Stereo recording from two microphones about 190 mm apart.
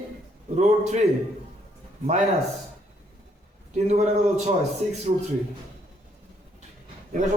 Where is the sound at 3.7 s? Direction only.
35° right (ahead or behind).